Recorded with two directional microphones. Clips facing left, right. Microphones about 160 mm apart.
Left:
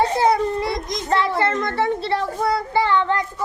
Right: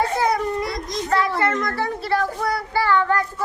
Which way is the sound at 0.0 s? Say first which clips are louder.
Left 3 dB; 25° left (ahead or behind).